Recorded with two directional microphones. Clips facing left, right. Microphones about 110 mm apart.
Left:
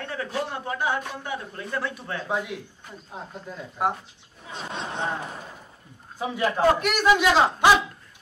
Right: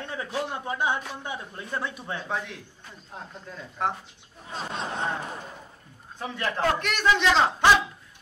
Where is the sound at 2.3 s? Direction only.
10° left (ahead or behind).